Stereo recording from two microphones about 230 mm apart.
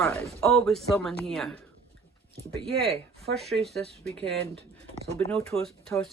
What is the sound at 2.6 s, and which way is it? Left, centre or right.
Speech, right.